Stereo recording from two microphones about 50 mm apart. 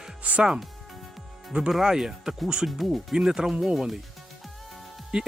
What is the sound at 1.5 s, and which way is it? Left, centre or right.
Speech, centre.